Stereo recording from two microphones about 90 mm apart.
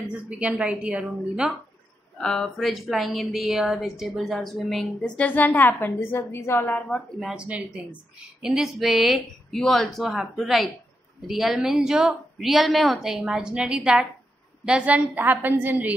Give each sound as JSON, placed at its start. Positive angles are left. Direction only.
{"t": 0.4, "sound": "a woman's voice", "side_deg": -15}
{"t": 2.1, "sound": "speech", "side_deg": 5}
{"t": 7.2, "sound": "a woman's voice", "side_deg": -5}